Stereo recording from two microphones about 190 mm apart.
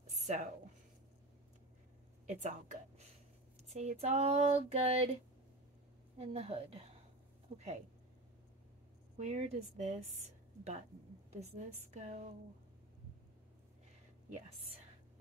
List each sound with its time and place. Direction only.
0.1 s a sound: 40° right (ahead or behind)
2.4 s a woman's voice: 40° right (ahead or behind)
6.1 s a woman's voice: 30° right (ahead or behind)
9.2 s a woman's voice: 40° right (ahead or behind)
11.3 s a woman's voice: 35° right (ahead or behind)